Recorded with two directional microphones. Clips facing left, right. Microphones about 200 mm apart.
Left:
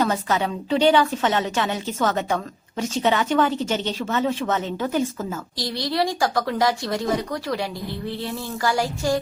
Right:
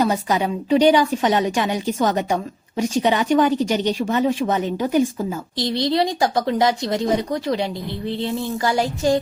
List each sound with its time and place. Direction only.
0.0 s a woman's voice: 15° right (ahead or behind)